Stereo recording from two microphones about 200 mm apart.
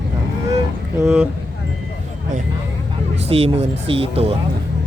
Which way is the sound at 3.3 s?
30° right (ahead or behind).